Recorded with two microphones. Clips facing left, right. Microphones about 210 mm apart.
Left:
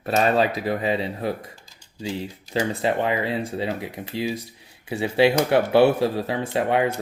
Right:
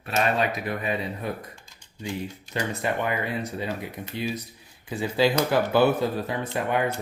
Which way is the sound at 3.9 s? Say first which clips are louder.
Left 3 dB; 85° left.